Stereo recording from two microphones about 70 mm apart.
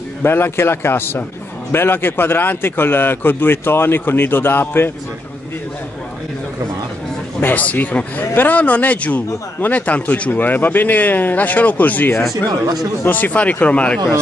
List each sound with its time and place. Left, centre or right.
0.2 s a man's voice: left
7.3 s a man's voice: left